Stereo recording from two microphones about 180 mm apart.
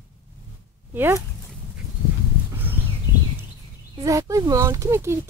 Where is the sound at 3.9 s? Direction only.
15° right (ahead or behind).